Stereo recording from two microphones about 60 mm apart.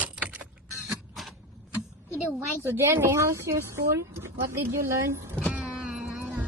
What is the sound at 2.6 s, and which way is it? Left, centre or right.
A woman's voice, right.